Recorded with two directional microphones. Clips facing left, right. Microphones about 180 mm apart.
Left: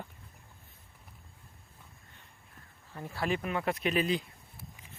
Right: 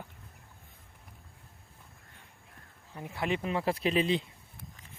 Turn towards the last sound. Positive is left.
turn(degrees=-25)  # may be behind; listen again after turning